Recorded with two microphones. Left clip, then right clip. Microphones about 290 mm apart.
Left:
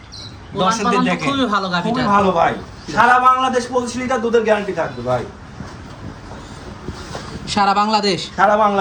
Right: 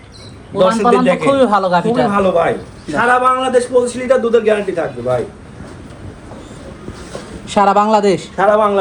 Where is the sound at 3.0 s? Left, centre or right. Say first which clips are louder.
Even; left.